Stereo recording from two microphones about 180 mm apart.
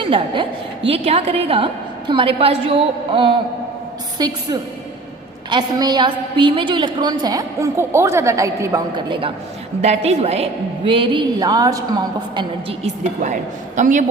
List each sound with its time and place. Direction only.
0.0 s a woman's voice: 30° right (ahead or behind)
5.5 s a woman's voice: 25° right (ahead or behind)
9.8 s a woman's voice: 35° right (ahead or behind); by 11.8 s 20° right (ahead or behind)
12.4 s a woman's voice: 35° right (ahead or behind)